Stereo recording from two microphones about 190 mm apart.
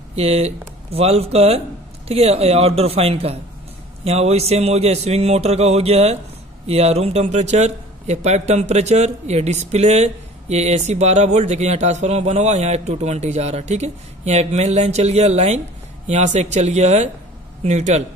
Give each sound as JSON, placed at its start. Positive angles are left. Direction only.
{"t": 0.1, "sound": "a man's voice", "side_deg": -30}